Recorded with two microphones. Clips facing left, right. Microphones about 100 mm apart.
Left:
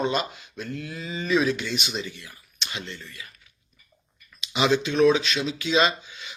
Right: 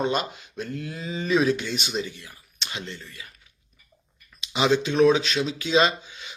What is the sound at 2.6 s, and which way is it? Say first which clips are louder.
Speech: even; 35° right (ahead or behind).